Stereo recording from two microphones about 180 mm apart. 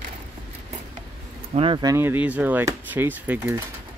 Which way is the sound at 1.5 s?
30° right (ahead or behind).